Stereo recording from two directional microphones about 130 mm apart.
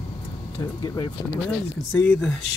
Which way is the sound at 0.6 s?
30° left (ahead or behind).